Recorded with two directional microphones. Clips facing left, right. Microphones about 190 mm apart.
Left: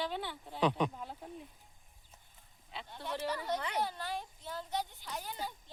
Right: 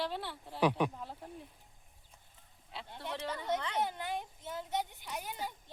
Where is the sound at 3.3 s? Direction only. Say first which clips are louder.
Right 2 dB; 25° right (ahead or behind).